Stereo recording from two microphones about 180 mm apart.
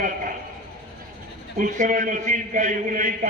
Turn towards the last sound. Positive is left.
turn(degrees=-45)  # may be behind; listen again after turning